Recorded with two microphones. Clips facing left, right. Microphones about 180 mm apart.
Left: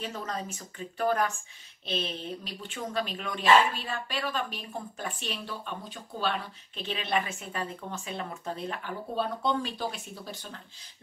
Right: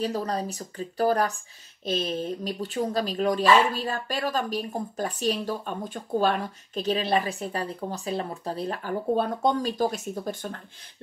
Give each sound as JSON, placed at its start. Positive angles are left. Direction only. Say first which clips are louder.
{"t": 0.0, "sound": "speech", "louder": "right 8 dB", "side_deg": -35}